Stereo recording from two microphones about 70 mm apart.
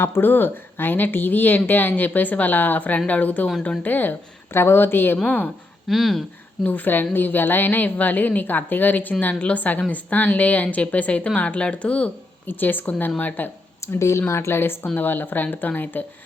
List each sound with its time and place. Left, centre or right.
0.0 s speech: left
5.9 s speech: centre
6.7 s speech: left
13.8 s speech: left